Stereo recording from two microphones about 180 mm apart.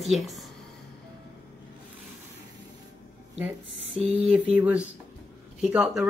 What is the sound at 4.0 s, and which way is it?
Speech, 35° right (ahead or behind).